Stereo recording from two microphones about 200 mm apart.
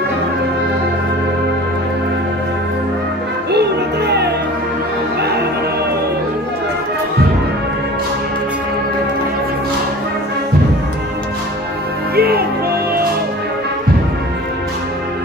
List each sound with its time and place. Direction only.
3.5 s music: 55° right (ahead or behind)
12.2 s music: 50° right (ahead or behind)